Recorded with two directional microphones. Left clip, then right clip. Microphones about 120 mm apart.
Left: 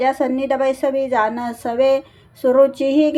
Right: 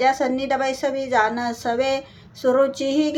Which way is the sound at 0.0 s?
45° left (ahead or behind).